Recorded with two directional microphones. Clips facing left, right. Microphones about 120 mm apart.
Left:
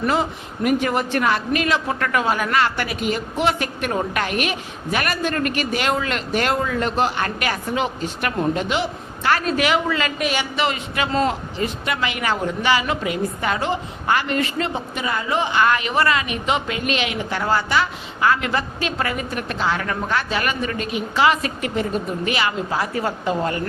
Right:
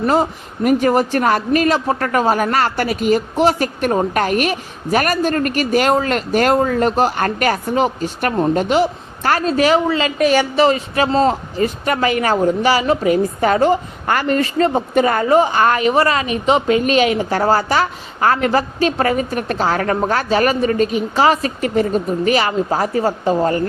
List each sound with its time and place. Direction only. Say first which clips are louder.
0.0 s speech: right 5 dB; 40° right (ahead or behind)